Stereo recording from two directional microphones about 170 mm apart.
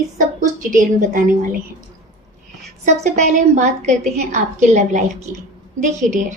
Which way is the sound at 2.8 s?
45° right (ahead or behind).